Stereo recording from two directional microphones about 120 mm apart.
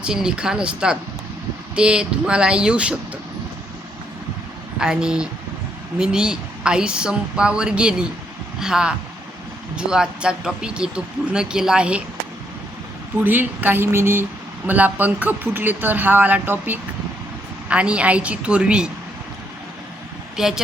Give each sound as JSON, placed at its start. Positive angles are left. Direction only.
{"t": 0.0, "sound": "speech", "side_deg": -5}
{"t": 4.8, "sound": "speech", "side_deg": -5}
{"t": 13.2, "sound": "speech", "side_deg": -15}
{"t": 20.4, "sound": "speech", "side_deg": -5}